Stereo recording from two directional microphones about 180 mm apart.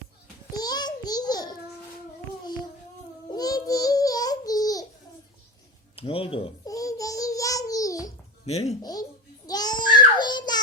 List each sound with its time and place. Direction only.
0.5 s a sound: 20° left (ahead or behind)
3.2 s child singing: 20° left (ahead or behind)
6.0 s speech: 30° left (ahead or behind)
6.7 s child singing: 20° left (ahead or behind)
8.4 s speech: 35° left (ahead or behind)
8.8 s babbling: 20° left (ahead or behind)